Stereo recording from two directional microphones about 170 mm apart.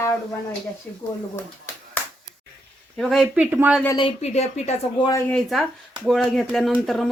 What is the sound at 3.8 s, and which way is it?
Speech, 25° left (ahead or behind).